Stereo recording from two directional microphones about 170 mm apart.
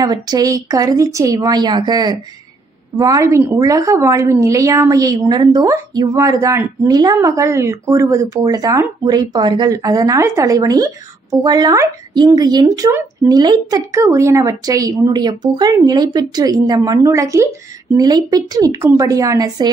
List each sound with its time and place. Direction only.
0.0 s a woman's voice: 25° right (ahead or behind)